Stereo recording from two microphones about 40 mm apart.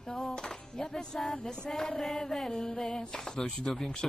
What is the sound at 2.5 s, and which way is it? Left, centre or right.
Music, centre.